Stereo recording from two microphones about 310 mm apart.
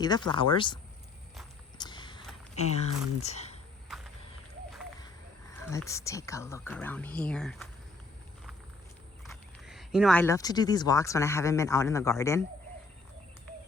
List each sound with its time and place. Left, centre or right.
0.0 s speech: centre
1.8 s a sound: centre
2.6 s speech: left
3.9 s vehicle: centre
5.5 s speech: centre
9.3 s speech: centre